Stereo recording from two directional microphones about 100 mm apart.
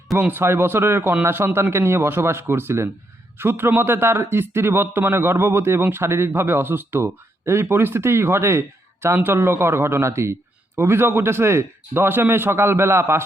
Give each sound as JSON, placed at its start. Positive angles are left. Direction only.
{"t": 0.2, "sound": "a man's voice", "side_deg": -20}